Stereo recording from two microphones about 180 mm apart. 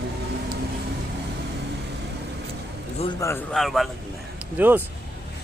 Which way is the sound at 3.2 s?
15° left (ahead or behind).